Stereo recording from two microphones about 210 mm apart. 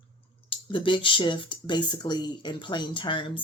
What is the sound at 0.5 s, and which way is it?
Speech, 25° left (ahead or behind).